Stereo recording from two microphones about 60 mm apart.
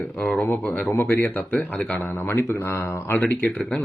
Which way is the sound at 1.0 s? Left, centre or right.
Left.